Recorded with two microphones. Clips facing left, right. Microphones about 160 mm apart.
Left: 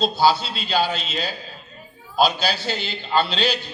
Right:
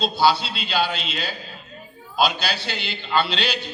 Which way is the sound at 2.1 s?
40° left (ahead or behind).